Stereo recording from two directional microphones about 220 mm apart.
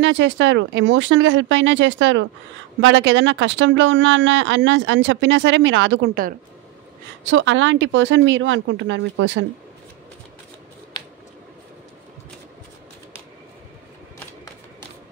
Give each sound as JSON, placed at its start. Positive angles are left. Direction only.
{"t": 0.0, "sound": "speech", "side_deg": -55}
{"t": 7.2, "sound": "speech", "side_deg": -55}